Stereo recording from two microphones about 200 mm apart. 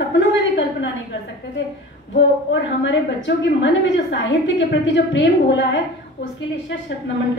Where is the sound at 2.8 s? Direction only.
65° left (ahead or behind).